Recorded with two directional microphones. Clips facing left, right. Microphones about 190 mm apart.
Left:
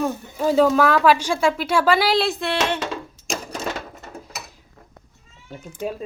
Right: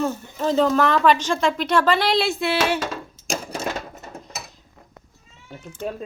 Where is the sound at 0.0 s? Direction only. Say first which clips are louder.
Left 1 dB; 10° left (ahead or behind).